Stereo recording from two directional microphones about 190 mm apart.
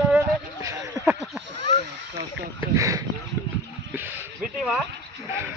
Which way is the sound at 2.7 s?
15° right (ahead or behind).